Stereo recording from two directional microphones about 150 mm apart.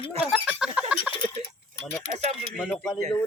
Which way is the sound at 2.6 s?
5° left (ahead or behind).